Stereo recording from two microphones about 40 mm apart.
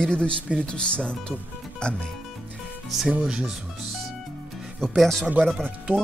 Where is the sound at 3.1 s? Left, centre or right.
Right.